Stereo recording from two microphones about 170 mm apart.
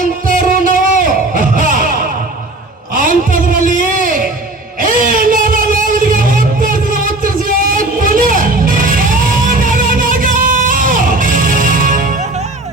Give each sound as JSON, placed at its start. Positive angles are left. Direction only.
{"t": 0.3, "sound": "music", "side_deg": -55}
{"t": 3.2, "sound": "music", "side_deg": -50}
{"t": 4.8, "sound": "a sound", "side_deg": -55}